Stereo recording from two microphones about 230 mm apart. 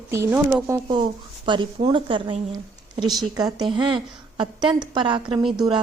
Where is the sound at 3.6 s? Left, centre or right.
Centre.